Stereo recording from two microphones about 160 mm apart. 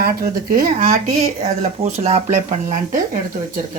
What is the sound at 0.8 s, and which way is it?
Speech, 45° right (ahead or behind).